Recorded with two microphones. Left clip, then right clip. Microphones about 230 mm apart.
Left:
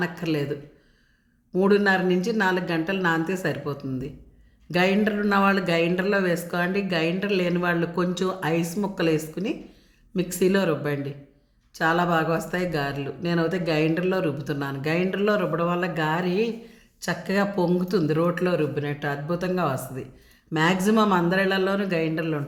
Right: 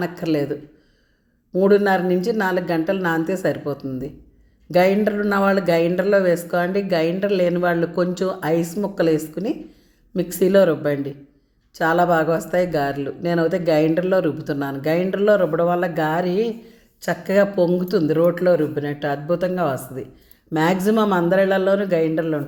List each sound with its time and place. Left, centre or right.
0.0 s speech: centre
1.5 s speech: centre
18.3 s a man's voice: left
18.7 s speech: centre